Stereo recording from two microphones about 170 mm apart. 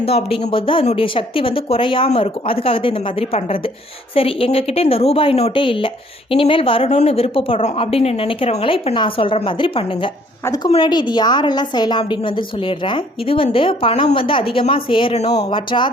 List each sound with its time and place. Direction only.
0.0 s a woman's voice: 35° left (ahead or behind)